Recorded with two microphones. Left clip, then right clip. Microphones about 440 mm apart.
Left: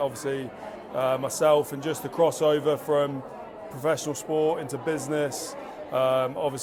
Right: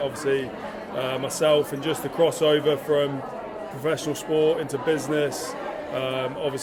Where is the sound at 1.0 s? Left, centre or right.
Left.